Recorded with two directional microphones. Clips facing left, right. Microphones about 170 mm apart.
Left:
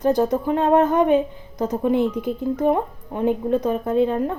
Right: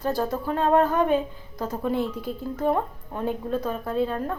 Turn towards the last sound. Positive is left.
turn(degrees=20)  # may be behind; listen again after turning